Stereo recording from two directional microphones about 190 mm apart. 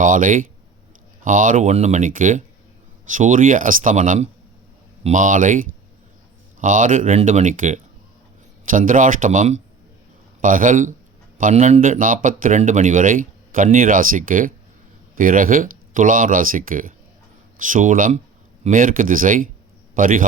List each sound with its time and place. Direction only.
0.0 s a man's voice: 45° right (ahead or behind)